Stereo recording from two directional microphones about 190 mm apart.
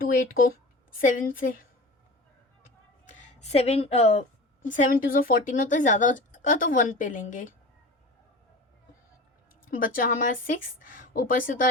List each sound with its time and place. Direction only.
0.0 s a woman's voice: 50° left (ahead or behind)
3.1 s a woman's voice: 35° left (ahead or behind)
9.6 s speech: 50° left (ahead or behind)